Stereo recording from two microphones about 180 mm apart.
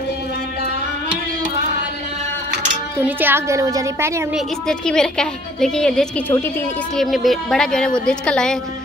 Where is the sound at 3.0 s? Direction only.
10° right (ahead or behind).